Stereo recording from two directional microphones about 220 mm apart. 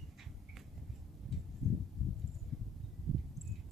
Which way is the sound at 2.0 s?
Centre (ahead or behind).